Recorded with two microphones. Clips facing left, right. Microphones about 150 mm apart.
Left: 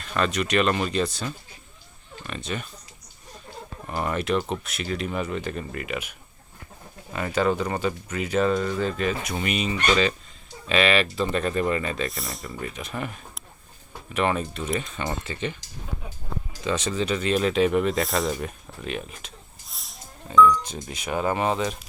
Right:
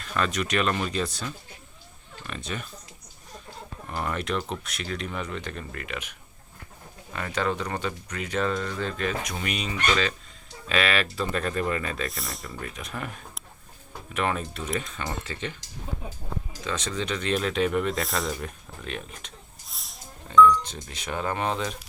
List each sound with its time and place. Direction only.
0.0 s speech: centre (ahead or behind)
3.8 s speech: 5° left (ahead or behind)
16.6 s speech: 10° left (ahead or behind)